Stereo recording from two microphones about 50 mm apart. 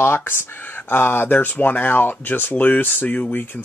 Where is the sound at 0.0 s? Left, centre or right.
Left.